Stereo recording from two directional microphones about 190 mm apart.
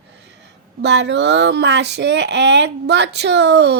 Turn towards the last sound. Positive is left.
turn(degrees=-65)  # may be behind; listen again after turning